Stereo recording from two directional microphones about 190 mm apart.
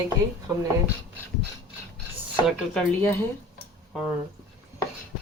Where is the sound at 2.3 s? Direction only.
10° left (ahead or behind).